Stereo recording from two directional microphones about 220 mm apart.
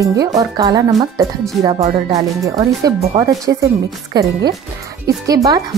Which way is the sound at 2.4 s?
15° right (ahead or behind).